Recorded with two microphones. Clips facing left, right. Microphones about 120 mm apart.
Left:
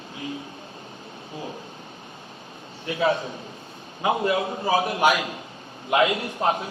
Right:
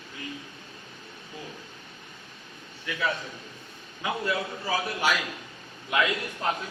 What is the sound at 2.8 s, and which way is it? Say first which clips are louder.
A man's voice: left 7 dB; 30° left (ahead or behind).